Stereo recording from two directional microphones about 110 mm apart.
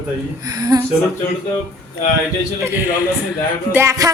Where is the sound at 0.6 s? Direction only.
35° right (ahead or behind).